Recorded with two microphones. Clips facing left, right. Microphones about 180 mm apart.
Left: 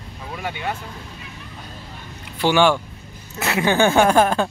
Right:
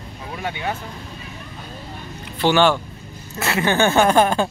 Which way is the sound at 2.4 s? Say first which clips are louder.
Even; 10° left (ahead or behind).